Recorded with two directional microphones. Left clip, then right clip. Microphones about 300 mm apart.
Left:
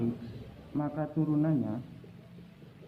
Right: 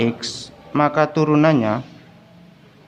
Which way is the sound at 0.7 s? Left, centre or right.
Right.